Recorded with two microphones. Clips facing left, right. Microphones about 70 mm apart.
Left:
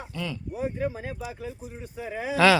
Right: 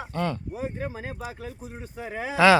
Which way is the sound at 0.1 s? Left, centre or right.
Right.